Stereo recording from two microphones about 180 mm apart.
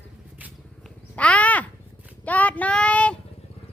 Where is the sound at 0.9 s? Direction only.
5° left (ahead or behind).